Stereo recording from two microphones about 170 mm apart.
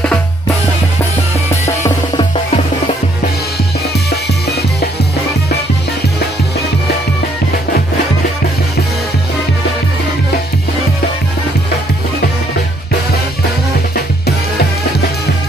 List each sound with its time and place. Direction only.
1.5 s music: 15° left (ahead or behind)
2.1 s music: 35° left (ahead or behind)
4.1 s music: 70° left (ahead or behind)